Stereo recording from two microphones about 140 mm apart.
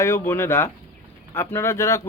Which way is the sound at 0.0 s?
20° left (ahead or behind).